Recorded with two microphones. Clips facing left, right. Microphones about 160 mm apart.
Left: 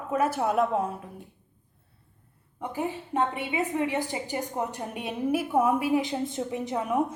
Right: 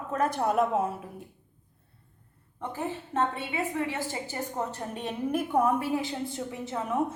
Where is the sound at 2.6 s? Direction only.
10° left (ahead or behind).